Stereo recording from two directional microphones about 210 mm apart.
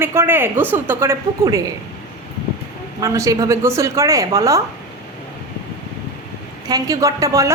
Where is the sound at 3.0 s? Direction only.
15° right (ahead or behind).